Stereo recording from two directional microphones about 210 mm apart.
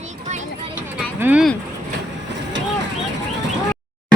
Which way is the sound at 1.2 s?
5° right (ahead or behind).